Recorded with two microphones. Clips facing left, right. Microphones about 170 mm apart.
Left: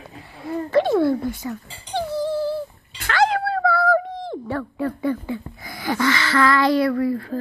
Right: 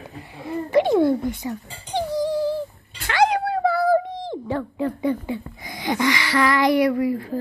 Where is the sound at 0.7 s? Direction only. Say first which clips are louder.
Right 1 dB; 15° right (ahead or behind).